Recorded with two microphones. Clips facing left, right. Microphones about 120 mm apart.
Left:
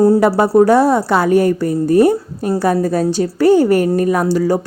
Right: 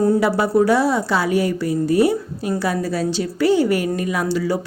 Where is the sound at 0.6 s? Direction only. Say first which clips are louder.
Left 6 dB; 50° left (ahead or behind).